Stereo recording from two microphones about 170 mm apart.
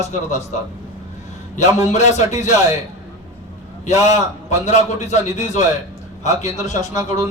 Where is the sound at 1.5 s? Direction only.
45° left (ahead or behind).